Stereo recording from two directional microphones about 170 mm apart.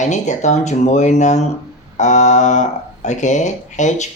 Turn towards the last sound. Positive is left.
turn(degrees=45)  # may be behind; listen again after turning